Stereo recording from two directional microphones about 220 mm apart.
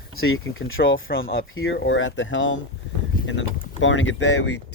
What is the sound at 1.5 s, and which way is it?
Speech, 55° left (ahead or behind).